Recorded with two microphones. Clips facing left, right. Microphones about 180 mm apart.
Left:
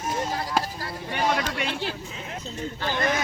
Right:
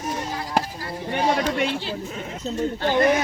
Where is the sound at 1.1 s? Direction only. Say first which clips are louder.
Right 4 dB; 40° right (ahead or behind).